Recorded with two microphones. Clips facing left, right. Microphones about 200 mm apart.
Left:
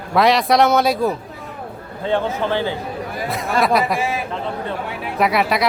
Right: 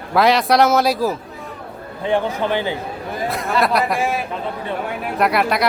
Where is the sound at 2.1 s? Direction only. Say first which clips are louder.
Right 1 dB; 15° right (ahead or behind).